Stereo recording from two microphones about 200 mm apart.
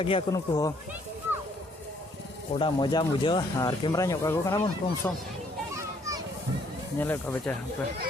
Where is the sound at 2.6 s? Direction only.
20° left (ahead or behind).